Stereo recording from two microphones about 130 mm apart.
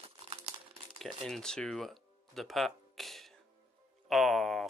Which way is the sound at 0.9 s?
Centre (ahead or behind).